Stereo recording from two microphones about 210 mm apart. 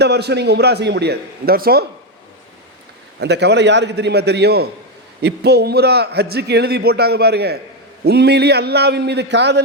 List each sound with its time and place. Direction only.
0.0 s a man's voice: 50° right (ahead or behind)
3.2 s a man's voice: 55° right (ahead or behind)